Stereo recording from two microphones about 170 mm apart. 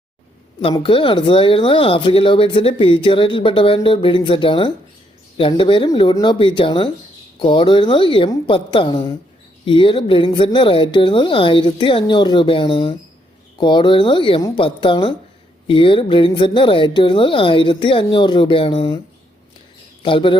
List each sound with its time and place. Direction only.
0.7 s a woman's voice: 30° left (ahead or behind)
20.0 s speech: 30° left (ahead or behind)